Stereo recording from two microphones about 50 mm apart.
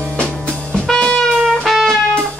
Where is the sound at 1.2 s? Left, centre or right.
Centre.